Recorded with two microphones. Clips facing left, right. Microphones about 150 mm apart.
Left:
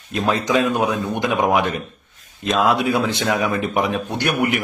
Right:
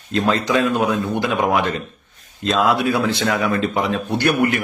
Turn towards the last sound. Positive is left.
turn(degrees=15)  # may be behind; listen again after turning